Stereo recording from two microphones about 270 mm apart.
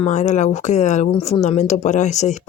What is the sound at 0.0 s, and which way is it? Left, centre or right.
Speech, left.